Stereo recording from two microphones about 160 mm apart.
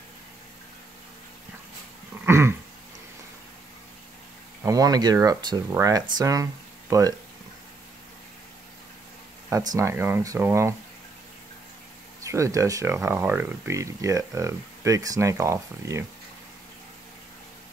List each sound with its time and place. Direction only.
2.2 s dog: 15° right (ahead or behind)
4.6 s speech: 25° right (ahead or behind)
9.5 s speech: 20° right (ahead or behind)
12.2 s speech: 20° right (ahead or behind)